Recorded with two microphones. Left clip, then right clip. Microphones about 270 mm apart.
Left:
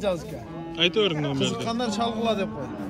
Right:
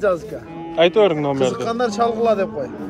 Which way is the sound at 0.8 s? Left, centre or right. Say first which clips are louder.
Right 8 dB; centre.